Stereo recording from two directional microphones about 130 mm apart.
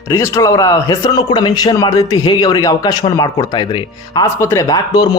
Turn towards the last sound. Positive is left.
turn(degrees=25)  # may be behind; listen again after turning